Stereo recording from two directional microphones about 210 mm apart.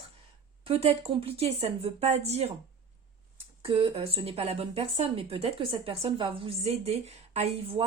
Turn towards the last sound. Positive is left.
turn(degrees=-30)  # may be behind; listen again after turning